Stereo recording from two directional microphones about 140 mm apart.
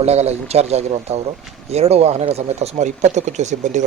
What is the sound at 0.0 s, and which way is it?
Speech, 50° right (ahead or behind).